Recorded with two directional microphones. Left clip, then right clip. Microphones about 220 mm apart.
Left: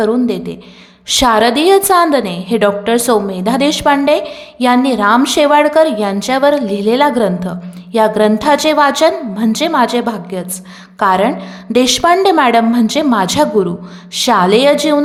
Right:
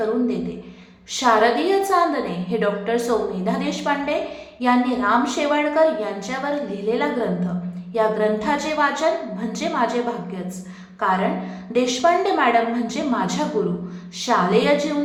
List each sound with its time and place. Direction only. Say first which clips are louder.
1.0 s a woman's voice: left 7 dB; 50° left (ahead or behind)